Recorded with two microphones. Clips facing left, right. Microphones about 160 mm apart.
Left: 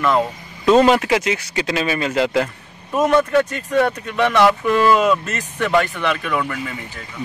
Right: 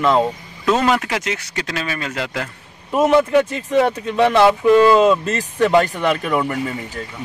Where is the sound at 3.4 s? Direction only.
25° right (ahead or behind).